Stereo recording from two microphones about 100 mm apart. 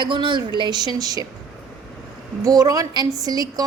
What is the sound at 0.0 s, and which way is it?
Speech, 50° right (ahead or behind).